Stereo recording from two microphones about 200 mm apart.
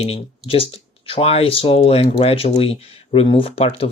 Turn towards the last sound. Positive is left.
turn(degrees=30)  # may be behind; listen again after turning